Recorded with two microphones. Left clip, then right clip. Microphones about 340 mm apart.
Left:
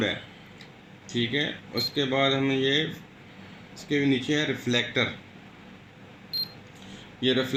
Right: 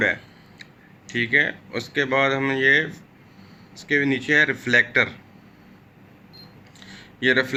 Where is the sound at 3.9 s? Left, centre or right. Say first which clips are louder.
Right 5 dB; right.